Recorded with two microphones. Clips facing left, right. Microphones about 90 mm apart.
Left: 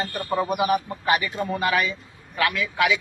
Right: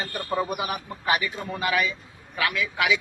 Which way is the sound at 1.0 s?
5° right (ahead or behind).